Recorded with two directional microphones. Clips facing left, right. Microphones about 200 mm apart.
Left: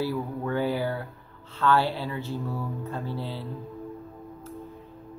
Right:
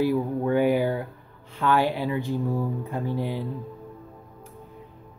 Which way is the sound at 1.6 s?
15° right (ahead or behind).